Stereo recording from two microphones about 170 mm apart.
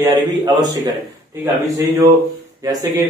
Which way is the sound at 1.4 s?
15° right (ahead or behind).